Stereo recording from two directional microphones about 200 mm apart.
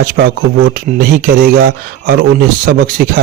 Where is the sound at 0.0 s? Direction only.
50° right (ahead or behind).